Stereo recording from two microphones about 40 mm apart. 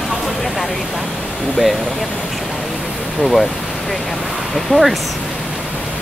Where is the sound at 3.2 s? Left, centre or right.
Centre.